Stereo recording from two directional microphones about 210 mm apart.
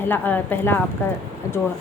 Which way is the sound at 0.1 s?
10° left (ahead or behind).